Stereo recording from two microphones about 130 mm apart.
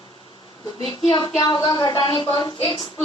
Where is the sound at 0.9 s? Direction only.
40° left (ahead or behind).